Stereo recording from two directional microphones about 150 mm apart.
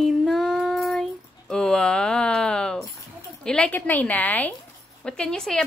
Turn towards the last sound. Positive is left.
turn(degrees=5)  # may be behind; listen again after turning